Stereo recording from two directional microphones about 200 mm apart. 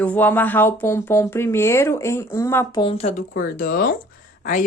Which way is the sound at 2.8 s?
30° left (ahead or behind).